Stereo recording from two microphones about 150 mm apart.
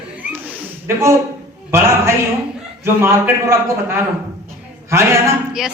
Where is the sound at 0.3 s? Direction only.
15° right (ahead or behind).